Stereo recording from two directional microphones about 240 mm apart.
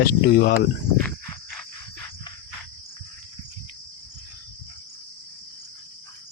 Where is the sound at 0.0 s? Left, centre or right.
Left.